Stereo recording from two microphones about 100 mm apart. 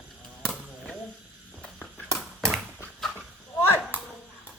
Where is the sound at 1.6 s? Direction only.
5° left (ahead or behind).